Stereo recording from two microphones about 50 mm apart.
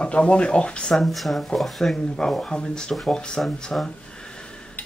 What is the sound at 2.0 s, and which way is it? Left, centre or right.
Speech, centre.